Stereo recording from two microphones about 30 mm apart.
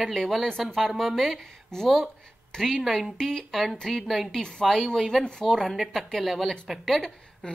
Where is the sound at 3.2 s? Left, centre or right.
Left.